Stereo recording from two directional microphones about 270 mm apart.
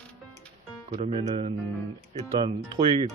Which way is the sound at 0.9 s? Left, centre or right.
Right.